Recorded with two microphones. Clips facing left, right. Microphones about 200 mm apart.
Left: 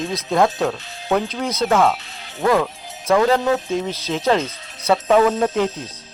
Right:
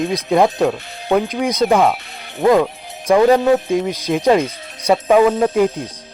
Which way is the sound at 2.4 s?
15° right (ahead or behind).